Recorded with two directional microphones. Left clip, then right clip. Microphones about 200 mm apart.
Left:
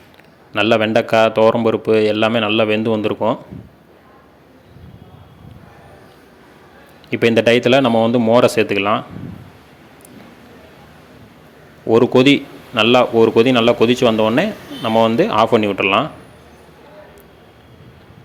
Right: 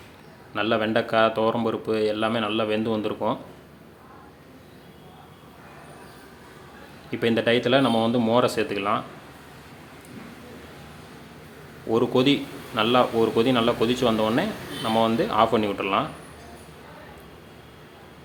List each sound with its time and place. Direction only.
0.5 s speech: 30° left (ahead or behind)
7.1 s speech: 35° left (ahead or behind)
11.9 s a man's voice: 30° left (ahead or behind)